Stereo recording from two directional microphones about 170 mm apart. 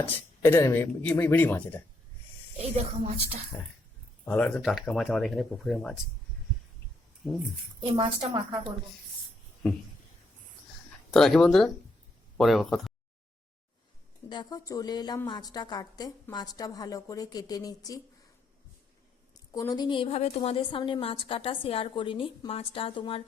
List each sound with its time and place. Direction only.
0.0 s speech: 15° left (ahead or behind)
2.6 s a woman's voice: 35° right (ahead or behind)
3.5 s speech: centre (ahead or behind)
7.8 s a woman's voice: 30° right (ahead or behind)
11.1 s speech: 5° left (ahead or behind)
14.3 s a woman's voice: 25° left (ahead or behind)
19.5 s a woman's voice: 20° left (ahead or behind)